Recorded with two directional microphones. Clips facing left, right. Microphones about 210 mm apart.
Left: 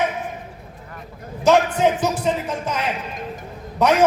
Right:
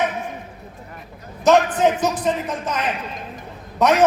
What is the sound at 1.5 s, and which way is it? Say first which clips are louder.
Speech: right 1 dB; 10° left (ahead or behind).